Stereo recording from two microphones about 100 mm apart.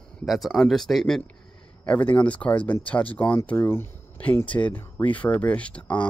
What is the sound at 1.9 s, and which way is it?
Speech, 15° left (ahead or behind).